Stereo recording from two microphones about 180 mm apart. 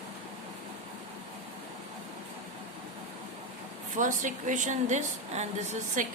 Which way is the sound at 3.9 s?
45° right (ahead or behind).